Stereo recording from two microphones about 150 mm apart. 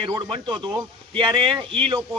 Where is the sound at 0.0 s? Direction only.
30° right (ahead or behind).